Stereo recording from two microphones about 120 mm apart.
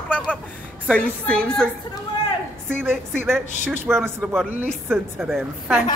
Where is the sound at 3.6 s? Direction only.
15° right (ahead or behind).